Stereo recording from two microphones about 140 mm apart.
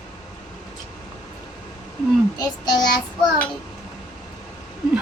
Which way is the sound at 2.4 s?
30° left (ahead or behind).